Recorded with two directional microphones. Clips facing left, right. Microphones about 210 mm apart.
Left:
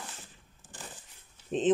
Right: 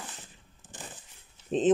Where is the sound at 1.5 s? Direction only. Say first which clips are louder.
Right 2 dB; 40° right (ahead or behind).